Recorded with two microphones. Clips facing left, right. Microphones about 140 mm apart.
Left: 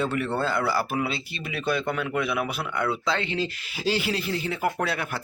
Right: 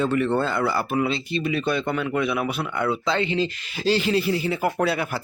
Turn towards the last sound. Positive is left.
turn(degrees=-5)  # may be behind; listen again after turning